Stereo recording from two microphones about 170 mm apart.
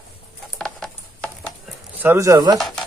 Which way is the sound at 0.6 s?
5° left (ahead or behind).